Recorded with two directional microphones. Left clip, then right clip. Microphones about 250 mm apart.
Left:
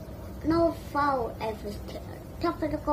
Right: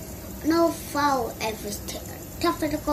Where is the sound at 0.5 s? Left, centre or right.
Right.